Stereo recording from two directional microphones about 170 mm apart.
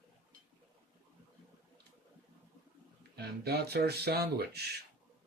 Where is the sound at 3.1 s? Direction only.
70° right (ahead or behind).